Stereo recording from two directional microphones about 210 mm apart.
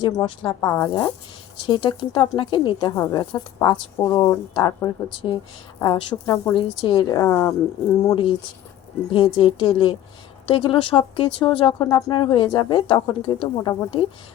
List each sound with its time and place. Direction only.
0.0 s speech: 20° left (ahead or behind)
8.1 s speech: 25° left (ahead or behind)